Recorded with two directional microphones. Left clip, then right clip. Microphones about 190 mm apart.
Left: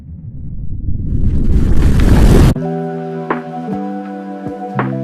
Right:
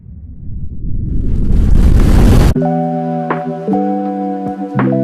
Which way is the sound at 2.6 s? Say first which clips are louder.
Right 5 dB; centre (ahead or behind).